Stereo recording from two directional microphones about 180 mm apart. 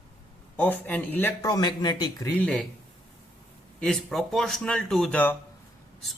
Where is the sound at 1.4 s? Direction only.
20° left (ahead or behind).